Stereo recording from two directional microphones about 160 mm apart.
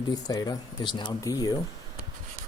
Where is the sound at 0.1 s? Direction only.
25° left (ahead or behind).